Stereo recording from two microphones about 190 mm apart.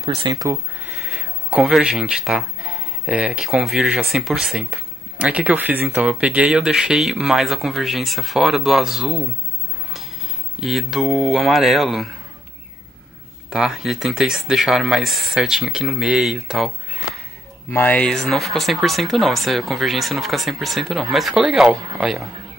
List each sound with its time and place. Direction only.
0.0 s speech: 30° right (ahead or behind)
0.3 s speech: 15° right (ahead or behind)
1.5 s speech: 5° right (ahead or behind)
10.6 s speech: centre (ahead or behind)
13.5 s speech: centre (ahead or behind)
17.6 s speech: 10° left (ahead or behind)